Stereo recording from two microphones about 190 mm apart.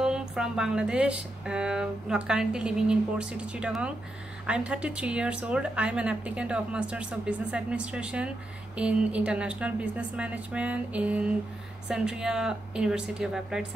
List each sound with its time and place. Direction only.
0.0 s a woman's voice: 5° right (ahead or behind)